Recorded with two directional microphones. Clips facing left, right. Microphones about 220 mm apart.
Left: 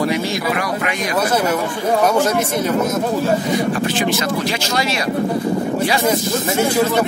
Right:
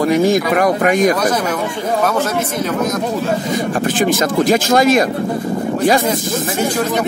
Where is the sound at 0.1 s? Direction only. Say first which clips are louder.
Right 7 dB; 50° right (ahead or behind).